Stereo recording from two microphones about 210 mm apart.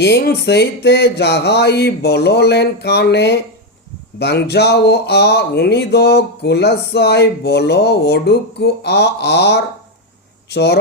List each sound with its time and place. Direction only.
0.0 s speech: 50° left (ahead or behind)